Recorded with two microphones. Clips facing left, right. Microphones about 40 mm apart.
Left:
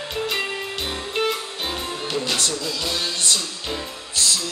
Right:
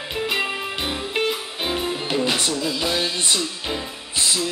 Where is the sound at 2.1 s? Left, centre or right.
Centre.